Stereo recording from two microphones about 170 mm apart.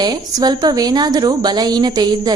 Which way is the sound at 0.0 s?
25° right (ahead or behind).